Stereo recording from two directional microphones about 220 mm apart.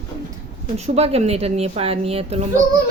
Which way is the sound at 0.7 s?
30° right (ahead or behind).